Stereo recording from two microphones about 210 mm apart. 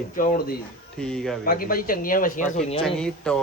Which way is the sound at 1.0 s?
Centre (ahead or behind).